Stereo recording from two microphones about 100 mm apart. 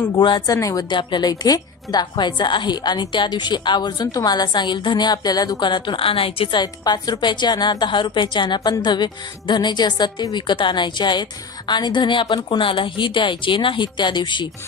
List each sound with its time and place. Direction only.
0.2 s a woman's voice: 50° left (ahead or behind)
0.6 s a woman's voice: 35° left (ahead or behind)
0.8 s a woman's voice: 50° left (ahead or behind); by 6.6 s 65° left (ahead or behind)
6.6 s a woman's voice: 40° left (ahead or behind)